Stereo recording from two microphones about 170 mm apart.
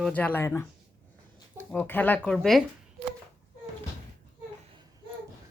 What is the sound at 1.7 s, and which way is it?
Speech, 10° left (ahead or behind).